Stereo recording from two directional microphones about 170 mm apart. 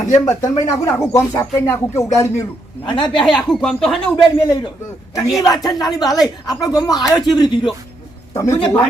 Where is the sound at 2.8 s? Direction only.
30° left (ahead or behind).